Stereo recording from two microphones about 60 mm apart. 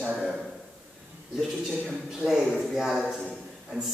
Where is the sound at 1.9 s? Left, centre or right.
Centre.